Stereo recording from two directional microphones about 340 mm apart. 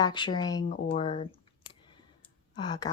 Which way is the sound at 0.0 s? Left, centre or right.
Centre.